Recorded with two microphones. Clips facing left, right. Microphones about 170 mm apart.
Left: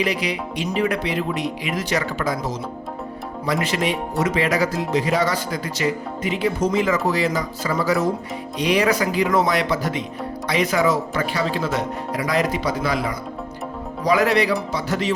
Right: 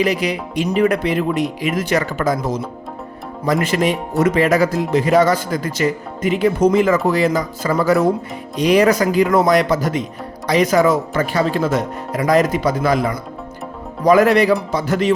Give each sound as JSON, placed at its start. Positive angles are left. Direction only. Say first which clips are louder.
{"t": 0.0, "sound": "speech", "louder": "right 5 dB", "side_deg": -45}